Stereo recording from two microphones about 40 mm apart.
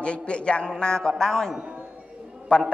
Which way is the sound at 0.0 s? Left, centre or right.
Left.